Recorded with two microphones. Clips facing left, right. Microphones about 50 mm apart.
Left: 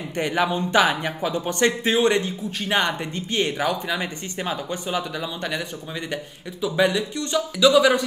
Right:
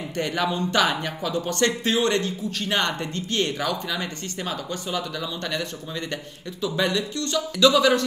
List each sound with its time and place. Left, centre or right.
0.1 s speech: centre